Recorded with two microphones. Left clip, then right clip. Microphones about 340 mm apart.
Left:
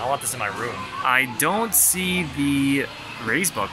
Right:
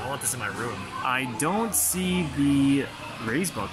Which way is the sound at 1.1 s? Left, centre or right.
Centre.